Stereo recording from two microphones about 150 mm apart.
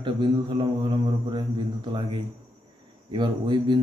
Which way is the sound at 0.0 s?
35° right (ahead or behind).